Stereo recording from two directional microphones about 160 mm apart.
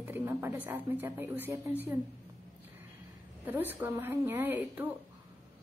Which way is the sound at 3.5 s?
15° right (ahead or behind).